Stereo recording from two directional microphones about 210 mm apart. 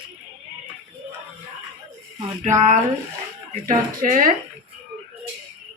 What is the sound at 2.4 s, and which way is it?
Speech, 35° right (ahead or behind).